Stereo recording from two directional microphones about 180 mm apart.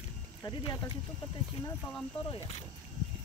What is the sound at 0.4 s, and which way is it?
Speech, 20° left (ahead or behind).